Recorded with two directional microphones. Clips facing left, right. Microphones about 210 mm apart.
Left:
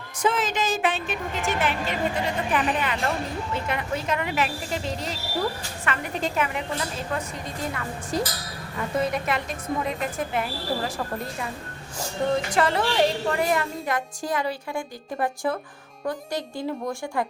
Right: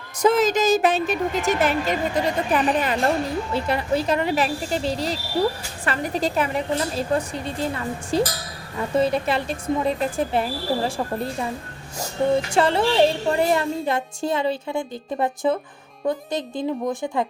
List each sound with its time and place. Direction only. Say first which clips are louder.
0.2 s a woman's voice: right 7 dB; 40° right (ahead or behind)
12.5 s a woman's voice: right 4 dB; 30° right (ahead or behind)